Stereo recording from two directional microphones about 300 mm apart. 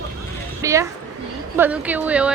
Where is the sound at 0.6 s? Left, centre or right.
Centre.